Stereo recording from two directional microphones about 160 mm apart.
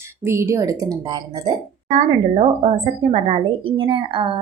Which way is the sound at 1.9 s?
45° right (ahead or behind).